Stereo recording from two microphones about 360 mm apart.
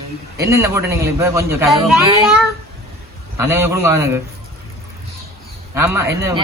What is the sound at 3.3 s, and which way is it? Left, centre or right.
Speech, centre.